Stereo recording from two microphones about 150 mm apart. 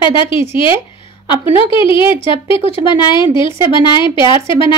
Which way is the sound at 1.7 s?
35° left (ahead or behind).